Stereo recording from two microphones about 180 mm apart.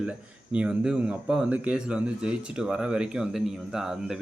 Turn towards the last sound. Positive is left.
turn(degrees=-5)  # may be behind; listen again after turning